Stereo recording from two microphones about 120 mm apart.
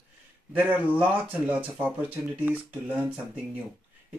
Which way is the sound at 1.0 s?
15° right (ahead or behind).